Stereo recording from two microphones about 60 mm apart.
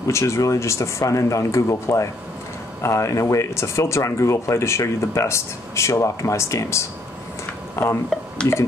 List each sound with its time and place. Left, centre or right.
0.0 s speech: left
8.1 s speech: centre